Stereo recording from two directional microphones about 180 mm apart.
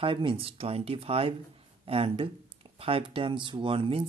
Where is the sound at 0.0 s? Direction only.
30° right (ahead or behind).